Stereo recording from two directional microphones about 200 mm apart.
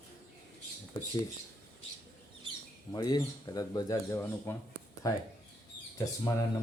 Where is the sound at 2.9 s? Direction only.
20° left (ahead or behind).